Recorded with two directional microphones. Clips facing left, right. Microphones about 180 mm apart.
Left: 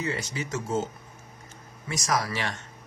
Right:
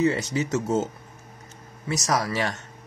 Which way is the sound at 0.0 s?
40° right (ahead or behind).